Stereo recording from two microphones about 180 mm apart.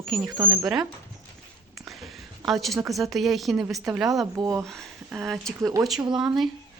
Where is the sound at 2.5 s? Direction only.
Centre (ahead or behind).